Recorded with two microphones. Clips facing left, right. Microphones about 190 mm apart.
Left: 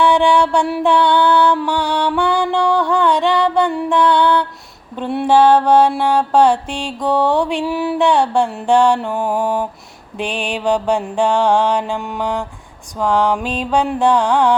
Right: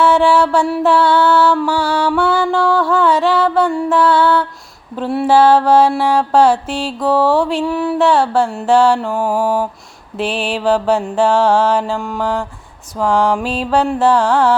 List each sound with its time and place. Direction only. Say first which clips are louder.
0.0 s music: right 1 dB; 5° right (ahead or behind)
4.9 s mantra: right 1 dB; 5° right (ahead or behind)
9.4 s a sound: right 2 dB; 10° right (ahead or behind)
10.2 s mantra: right 3 dB; 5° right (ahead or behind)